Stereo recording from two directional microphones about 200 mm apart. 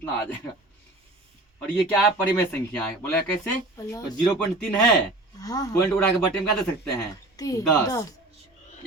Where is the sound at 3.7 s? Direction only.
15° left (ahead or behind).